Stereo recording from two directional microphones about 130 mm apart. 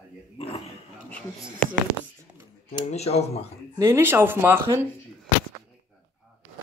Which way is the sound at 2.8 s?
55° left (ahead or behind).